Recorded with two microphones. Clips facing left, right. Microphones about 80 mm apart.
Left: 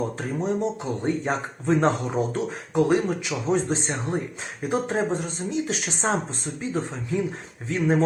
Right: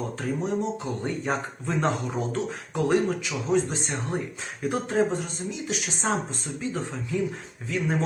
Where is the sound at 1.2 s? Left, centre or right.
Left.